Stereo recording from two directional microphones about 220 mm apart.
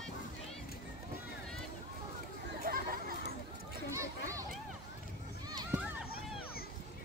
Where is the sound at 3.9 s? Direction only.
15° right (ahead or behind).